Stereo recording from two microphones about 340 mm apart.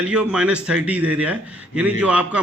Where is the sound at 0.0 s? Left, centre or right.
Centre.